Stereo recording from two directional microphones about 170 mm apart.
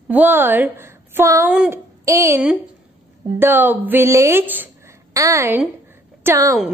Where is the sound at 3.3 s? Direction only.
10° right (ahead or behind).